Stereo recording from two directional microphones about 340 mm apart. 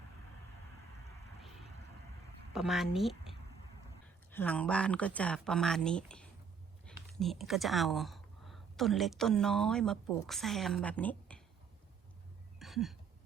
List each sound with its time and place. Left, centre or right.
2.5 s speech: centre
4.4 s speech: centre
12.5 s a sound: centre